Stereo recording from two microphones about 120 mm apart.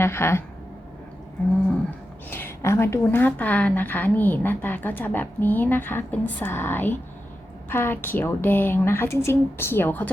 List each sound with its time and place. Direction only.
0.0 s a woman's voice: 20° left (ahead or behind)
2.3 s a woman's voice: 20° left (ahead or behind)